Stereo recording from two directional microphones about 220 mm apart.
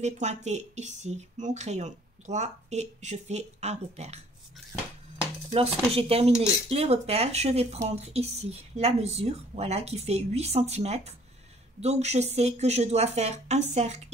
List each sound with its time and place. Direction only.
0.0 s speech: 30° right (ahead or behind)
5.5 s a woman's voice: 25° right (ahead or behind)